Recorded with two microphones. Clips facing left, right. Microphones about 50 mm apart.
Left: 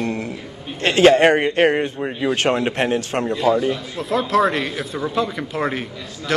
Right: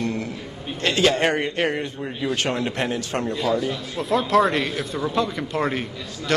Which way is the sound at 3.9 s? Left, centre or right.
Centre.